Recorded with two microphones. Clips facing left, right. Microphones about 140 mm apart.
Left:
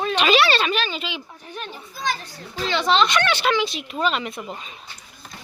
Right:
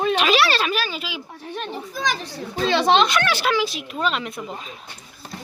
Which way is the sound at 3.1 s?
5° right (ahead or behind).